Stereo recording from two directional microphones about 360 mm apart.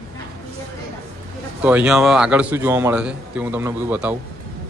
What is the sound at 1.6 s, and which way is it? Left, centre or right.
A man's voice, centre.